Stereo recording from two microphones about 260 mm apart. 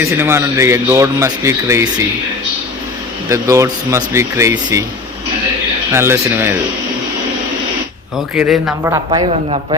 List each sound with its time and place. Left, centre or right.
0.0 s a man's voice: centre
3.2 s a man's voice: centre
5.9 s a man's voice: centre
8.4 s speech: centre
8.9 s speech: centre